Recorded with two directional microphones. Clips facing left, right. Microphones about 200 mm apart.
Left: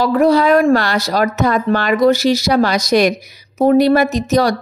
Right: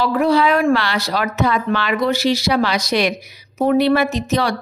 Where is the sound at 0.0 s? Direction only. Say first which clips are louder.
Left 3 dB; 40° left (ahead or behind).